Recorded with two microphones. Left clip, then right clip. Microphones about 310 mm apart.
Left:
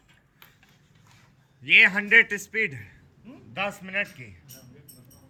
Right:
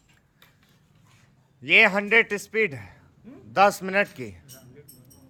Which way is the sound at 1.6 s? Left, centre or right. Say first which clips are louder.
Even; centre.